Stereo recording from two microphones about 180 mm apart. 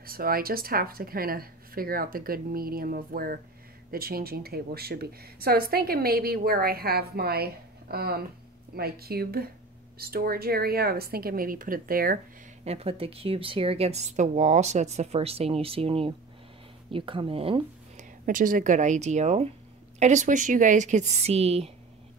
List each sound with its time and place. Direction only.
0.0 s a woman's voice: 55° right (ahead or behind)
12.6 s a woman's voice: 35° right (ahead or behind)
17.9 s a woman's voice: 50° right (ahead or behind)